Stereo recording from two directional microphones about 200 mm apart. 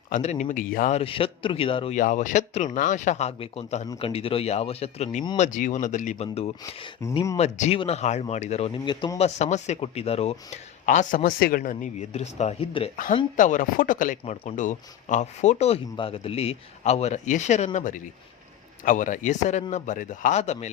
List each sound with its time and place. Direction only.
0.1 s speech: 35° left (ahead or behind)
0.9 s speech: 25° left (ahead or behind)
2.0 s speech: 40° left (ahead or behind)
13.3 s speech: 40° left (ahead or behind)